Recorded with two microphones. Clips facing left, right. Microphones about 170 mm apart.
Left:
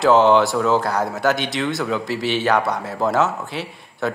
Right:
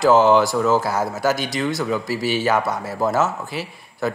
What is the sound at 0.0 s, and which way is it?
A man's voice, centre (ahead or behind).